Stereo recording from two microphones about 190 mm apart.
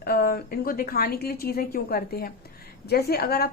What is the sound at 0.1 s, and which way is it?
A woman's voice, 50° left (ahead or behind).